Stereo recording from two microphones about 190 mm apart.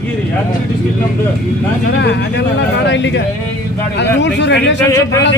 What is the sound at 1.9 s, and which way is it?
Speech, 65° left (ahead or behind).